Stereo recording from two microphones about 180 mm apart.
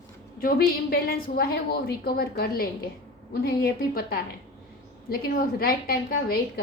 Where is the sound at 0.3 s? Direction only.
55° left (ahead or behind).